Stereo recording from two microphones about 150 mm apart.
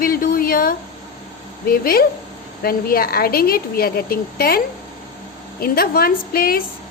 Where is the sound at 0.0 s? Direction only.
75° left (ahead or behind).